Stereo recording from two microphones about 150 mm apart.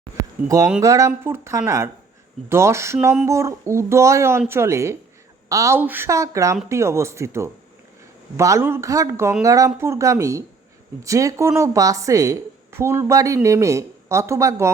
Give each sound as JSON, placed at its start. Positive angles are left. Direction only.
{"t": 0.4, "sound": "a woman's voice", "side_deg": -20}